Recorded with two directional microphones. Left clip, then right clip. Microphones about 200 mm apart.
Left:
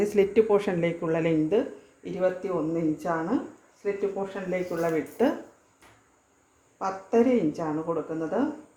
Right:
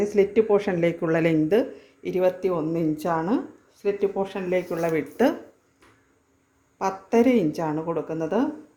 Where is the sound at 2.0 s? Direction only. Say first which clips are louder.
Right 5 dB; 40° right (ahead or behind).